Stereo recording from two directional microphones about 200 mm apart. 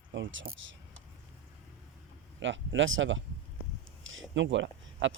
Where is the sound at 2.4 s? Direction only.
70° right (ahead or behind).